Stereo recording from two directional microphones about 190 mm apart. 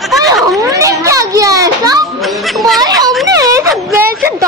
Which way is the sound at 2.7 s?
20° right (ahead or behind).